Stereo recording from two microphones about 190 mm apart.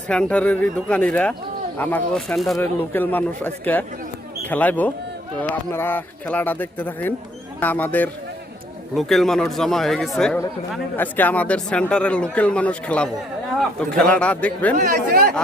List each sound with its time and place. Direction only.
0.1 s a man's voice: 5° left (ahead or behind)
14.8 s speech: 50° right (ahead or behind)